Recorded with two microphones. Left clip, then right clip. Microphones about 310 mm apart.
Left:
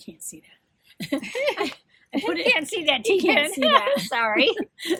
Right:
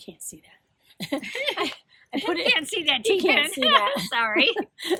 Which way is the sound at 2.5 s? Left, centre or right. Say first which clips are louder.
Left 1 dB; centre.